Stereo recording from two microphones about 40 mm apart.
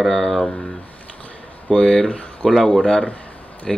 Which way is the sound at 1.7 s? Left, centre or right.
Left.